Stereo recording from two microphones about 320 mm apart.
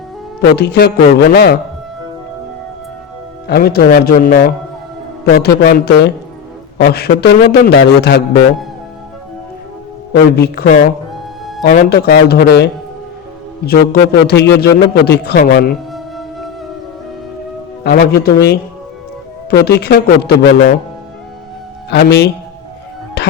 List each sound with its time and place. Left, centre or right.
0.5 s a man's voice: left
3.4 s a man's voice: left
10.1 s a man's voice: left
15.9 s music: centre
17.8 s a man's voice: left
21.8 s a man's voice: left
23.2 s music: left